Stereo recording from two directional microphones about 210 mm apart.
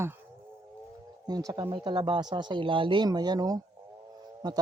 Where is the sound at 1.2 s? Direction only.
20° right (ahead or behind).